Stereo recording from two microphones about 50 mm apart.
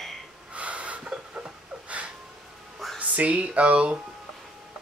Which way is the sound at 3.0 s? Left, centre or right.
Right.